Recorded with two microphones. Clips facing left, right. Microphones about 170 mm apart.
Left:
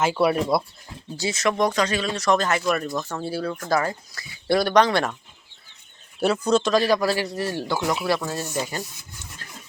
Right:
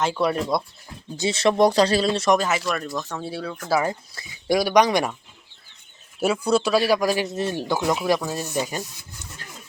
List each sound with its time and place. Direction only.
0.0 s speech: 5° left (ahead or behind)
1.1 s speech: 25° right (ahead or behind)
2.3 s speech: 10° right (ahead or behind)
3.8 s speech: 25° right (ahead or behind)
4.4 s speech: 10° right (ahead or behind)
6.1 s speech: 10° right (ahead or behind)